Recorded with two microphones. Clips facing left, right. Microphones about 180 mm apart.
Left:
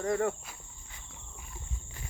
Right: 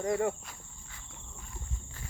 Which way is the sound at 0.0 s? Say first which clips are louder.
Even; 20° right (ahead or behind).